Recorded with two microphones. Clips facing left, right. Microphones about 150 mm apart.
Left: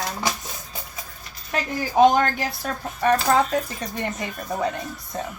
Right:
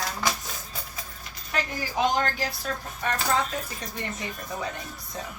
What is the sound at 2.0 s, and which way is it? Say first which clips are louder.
Speech: left 9 dB; 55° left (ahead or behind).